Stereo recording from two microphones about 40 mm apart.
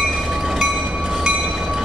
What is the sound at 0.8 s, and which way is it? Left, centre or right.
Train, right.